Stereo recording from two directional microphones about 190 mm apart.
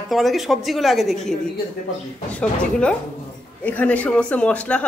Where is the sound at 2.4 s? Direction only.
5° left (ahead or behind).